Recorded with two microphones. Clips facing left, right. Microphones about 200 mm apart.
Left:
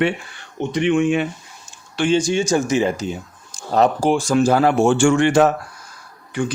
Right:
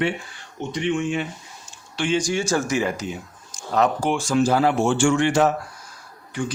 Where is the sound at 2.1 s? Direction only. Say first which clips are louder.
Left 4 dB; 25° left (ahead or behind).